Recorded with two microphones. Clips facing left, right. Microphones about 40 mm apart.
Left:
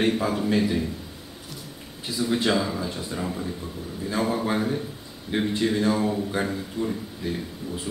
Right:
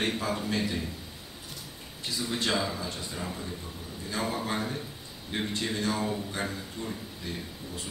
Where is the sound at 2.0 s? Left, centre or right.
Centre.